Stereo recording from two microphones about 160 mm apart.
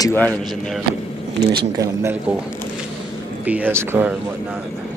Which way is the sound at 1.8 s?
20° right (ahead or behind).